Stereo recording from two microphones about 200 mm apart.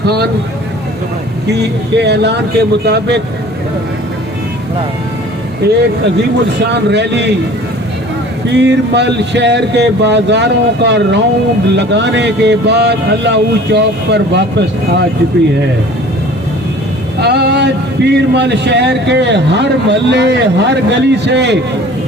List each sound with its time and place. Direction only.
0.0 s speech: 55° right (ahead or behind)
1.5 s a man's voice: 55° right (ahead or behind)
5.6 s a man's voice: 55° right (ahead or behind)
8.5 s a man's voice: 60° right (ahead or behind)
17.2 s vehicle: 55° right (ahead or behind)
18.1 s a man's voice: 60° right (ahead or behind)